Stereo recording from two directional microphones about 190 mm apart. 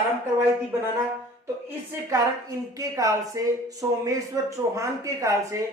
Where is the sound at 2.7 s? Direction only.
15° right (ahead or behind).